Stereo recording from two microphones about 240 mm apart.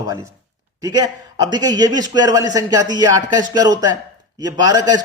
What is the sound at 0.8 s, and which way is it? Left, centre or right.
A man's voice, centre.